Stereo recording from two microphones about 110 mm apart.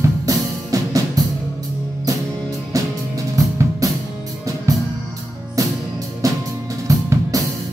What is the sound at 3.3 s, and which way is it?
Music, 30° right (ahead or behind).